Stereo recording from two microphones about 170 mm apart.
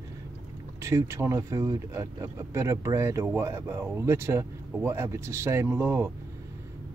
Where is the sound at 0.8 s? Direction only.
15° right (ahead or behind).